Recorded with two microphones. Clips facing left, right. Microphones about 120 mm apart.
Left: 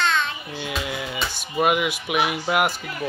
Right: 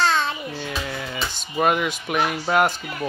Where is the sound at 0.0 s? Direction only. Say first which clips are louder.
Right 2 dB; 35° right (ahead or behind).